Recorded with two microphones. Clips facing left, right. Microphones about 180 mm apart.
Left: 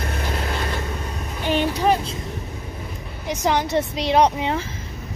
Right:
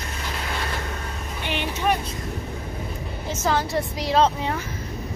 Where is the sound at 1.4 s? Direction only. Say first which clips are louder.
Left 5 dB; 40° left (ahead or behind).